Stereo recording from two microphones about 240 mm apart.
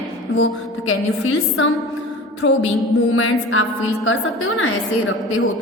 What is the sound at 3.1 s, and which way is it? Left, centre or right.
A woman's voice, left.